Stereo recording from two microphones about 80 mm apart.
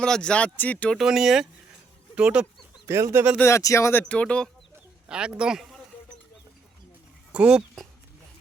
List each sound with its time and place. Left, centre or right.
0.0 s speech: centre
0.9 s speech: centre
2.8 s speech: right
3.4 s speech: left
4.1 s speech: centre
5.0 s a man's voice: centre
7.3 s speech: centre